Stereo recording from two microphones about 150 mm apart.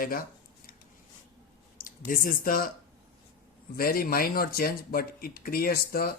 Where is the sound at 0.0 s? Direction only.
75° left (ahead or behind).